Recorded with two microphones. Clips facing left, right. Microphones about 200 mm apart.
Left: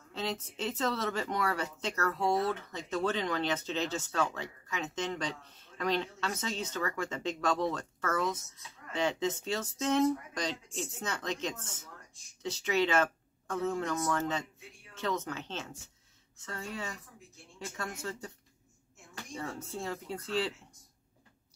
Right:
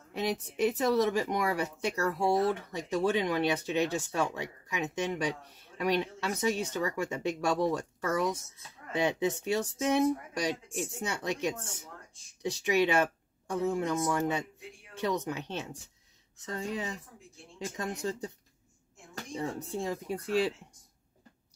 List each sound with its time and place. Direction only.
0.1 s a woman's voice: 15° right (ahead or behind)
19.3 s speech: 15° right (ahead or behind)